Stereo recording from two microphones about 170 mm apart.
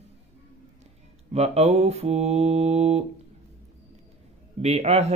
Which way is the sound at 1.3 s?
40° right (ahead or behind).